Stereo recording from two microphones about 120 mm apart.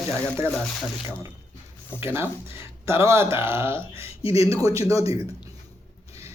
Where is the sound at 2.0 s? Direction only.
20° right (ahead or behind).